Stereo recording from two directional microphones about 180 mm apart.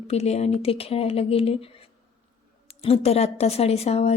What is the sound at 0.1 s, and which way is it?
A woman's voice, 35° left (ahead or behind).